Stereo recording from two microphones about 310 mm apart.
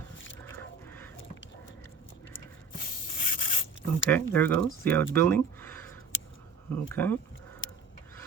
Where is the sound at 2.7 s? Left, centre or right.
Left.